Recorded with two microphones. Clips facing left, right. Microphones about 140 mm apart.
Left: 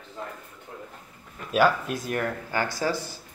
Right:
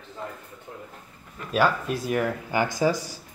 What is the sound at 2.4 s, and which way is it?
Speech, 15° right (ahead or behind).